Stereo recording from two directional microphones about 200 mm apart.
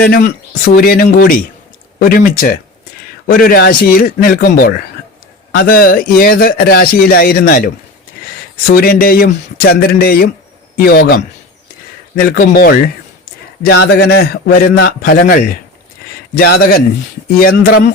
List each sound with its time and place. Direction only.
0.6 s a man's voice: 50° left (ahead or behind)
13.6 s a man's voice: 55° left (ahead or behind)